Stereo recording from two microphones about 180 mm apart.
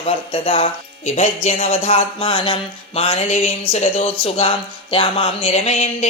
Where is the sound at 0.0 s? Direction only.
30° left (ahead or behind).